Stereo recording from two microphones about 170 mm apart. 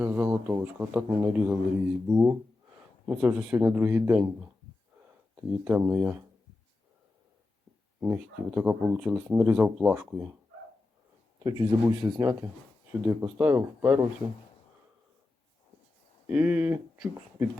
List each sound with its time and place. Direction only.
0.0 s speech: 10° right (ahead or behind)
5.6 s speech: 15° right (ahead or behind)
8.0 s speech: 10° right (ahead or behind)
11.4 s speech: 30° right (ahead or behind)
12.9 s speech: 10° right (ahead or behind)
16.3 s speech: 10° right (ahead or behind)